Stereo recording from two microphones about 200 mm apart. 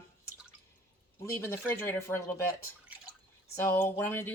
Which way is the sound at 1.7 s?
10° left (ahead or behind).